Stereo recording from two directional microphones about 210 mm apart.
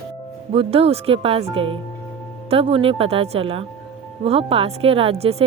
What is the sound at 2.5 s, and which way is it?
Speech, 25° right (ahead or behind).